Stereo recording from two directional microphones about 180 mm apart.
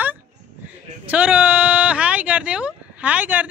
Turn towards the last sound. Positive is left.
turn(degrees=-10)  # may be behind; listen again after turning